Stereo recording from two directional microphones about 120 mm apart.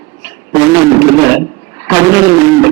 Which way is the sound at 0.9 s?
20° right (ahead or behind).